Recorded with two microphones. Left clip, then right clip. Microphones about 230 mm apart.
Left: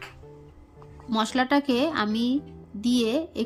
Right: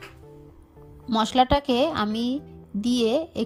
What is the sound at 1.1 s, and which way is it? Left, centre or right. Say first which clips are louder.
A woman's voice: right 3 dB; right.